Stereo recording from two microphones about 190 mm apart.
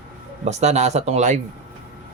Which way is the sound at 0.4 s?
35° right (ahead or behind).